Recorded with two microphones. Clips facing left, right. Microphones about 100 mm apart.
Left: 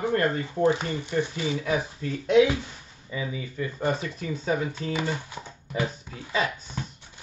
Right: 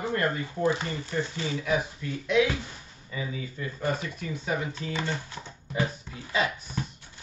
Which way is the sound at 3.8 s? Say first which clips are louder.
Left 2 dB; 20° left (ahead or behind).